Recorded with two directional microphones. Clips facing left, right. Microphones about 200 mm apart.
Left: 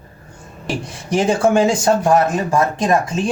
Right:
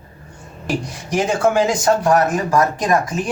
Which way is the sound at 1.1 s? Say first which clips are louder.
Left 2 dB; 30° left (ahead or behind).